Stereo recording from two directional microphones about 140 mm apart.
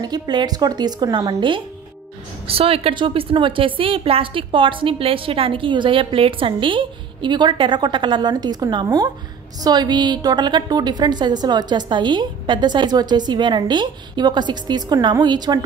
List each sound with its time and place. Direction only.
0.0 s a woman's voice: 30° right (ahead or behind)
2.4 s a woman's voice: 45° right (ahead or behind)